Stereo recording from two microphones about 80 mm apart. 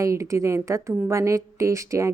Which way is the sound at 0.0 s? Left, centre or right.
Right.